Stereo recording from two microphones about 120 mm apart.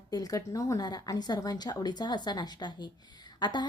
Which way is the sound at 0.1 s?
30° left (ahead or behind).